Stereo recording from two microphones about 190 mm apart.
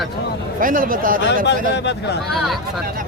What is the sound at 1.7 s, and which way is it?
Speech, 60° left (ahead or behind).